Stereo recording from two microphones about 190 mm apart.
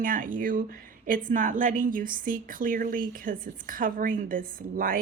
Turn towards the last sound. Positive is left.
turn(degrees=-50)  # may be behind; listen again after turning